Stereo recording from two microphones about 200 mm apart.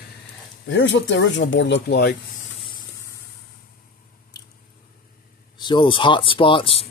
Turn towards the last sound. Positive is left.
turn(degrees=25)  # may be behind; listen again after turning